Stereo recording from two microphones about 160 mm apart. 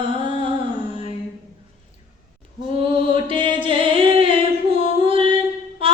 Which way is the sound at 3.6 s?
35° right (ahead or behind).